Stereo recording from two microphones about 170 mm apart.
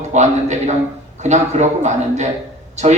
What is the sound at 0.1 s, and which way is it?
A man's voice, 45° right (ahead or behind).